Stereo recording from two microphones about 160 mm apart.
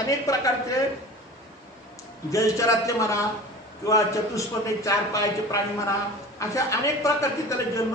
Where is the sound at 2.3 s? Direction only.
20° left (ahead or behind).